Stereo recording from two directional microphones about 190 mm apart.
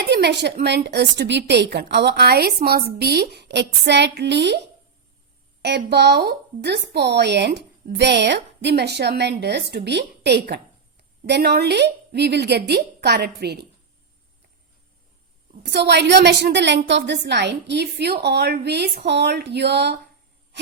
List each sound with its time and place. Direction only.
0.0 s a woman's voice: 60° right (ahead or behind)
5.6 s a woman's voice: 60° right (ahead or behind)
15.6 s a woman's voice: 60° right (ahead or behind)